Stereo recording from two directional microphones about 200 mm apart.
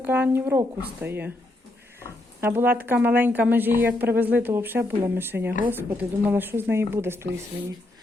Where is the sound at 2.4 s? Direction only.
10° right (ahead or behind).